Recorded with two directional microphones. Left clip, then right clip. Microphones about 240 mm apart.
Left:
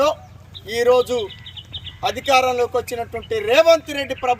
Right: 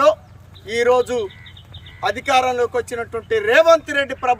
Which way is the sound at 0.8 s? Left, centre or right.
Centre.